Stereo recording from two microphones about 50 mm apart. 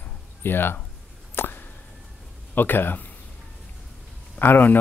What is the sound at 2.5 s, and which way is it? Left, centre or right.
Speech, left.